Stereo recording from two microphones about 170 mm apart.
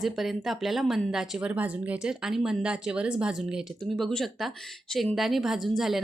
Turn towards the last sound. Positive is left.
turn(degrees=0)  # may be behind; listen again after turning